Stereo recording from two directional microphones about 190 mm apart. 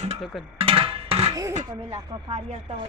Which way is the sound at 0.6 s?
30° right (ahead or behind).